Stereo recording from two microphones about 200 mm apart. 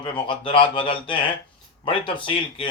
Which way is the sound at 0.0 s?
25° left (ahead or behind).